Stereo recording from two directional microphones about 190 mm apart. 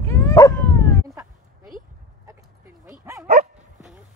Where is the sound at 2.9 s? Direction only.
15° right (ahead or behind).